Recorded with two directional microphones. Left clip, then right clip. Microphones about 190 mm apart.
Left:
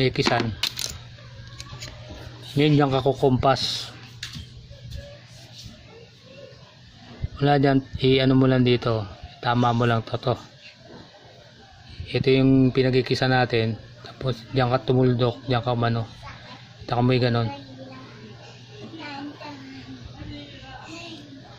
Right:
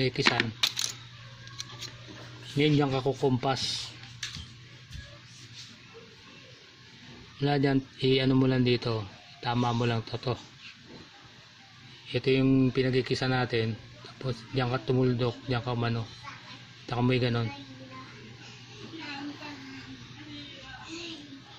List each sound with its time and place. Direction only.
0.0 s speech: 10° left (ahead or behind)
2.5 s speech: 5° left (ahead or behind)
7.3 s speech: 10° left (ahead or behind)
12.1 s a man's voice: 5° left (ahead or behind)